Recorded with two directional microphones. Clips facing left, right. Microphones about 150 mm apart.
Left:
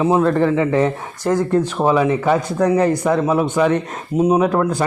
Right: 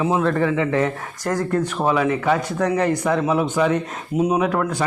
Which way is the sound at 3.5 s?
60° left (ahead or behind).